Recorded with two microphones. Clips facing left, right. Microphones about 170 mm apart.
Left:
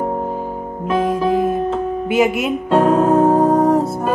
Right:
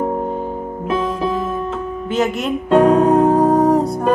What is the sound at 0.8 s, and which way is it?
Music, 45° left (ahead or behind).